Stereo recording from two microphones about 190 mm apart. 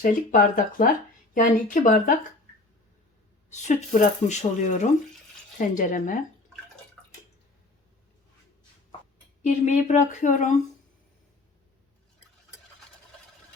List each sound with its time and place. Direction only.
0.0 s speech: 45° left (ahead or behind)
3.5 s a woman's voice: 35° left (ahead or behind)
9.4 s a woman's voice: 40° left (ahead or behind)